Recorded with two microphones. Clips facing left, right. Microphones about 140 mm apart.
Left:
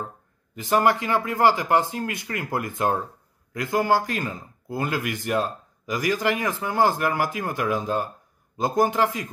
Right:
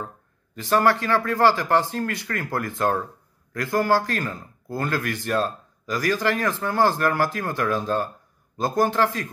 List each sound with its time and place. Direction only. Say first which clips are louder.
0.6 s speech: right 1 dB; 15° left (ahead or behind)